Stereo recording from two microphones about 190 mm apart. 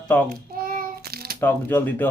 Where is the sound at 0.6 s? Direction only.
50° right (ahead or behind).